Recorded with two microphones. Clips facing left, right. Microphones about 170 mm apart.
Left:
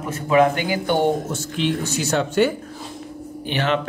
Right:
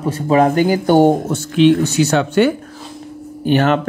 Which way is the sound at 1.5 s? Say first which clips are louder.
Right 12 dB; 70° right (ahead or behind).